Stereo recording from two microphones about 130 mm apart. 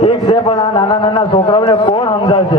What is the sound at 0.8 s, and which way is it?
A man's voice, 40° left (ahead or behind).